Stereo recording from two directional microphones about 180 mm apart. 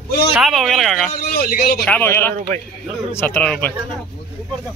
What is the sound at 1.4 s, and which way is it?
Speech, 55° left (ahead or behind).